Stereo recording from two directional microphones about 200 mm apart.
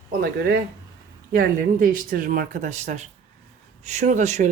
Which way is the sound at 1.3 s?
45° right (ahead or behind).